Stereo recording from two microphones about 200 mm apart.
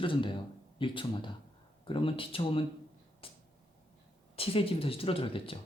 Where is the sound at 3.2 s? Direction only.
25° left (ahead or behind).